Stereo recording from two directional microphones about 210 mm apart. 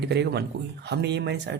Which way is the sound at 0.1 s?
50° right (ahead or behind).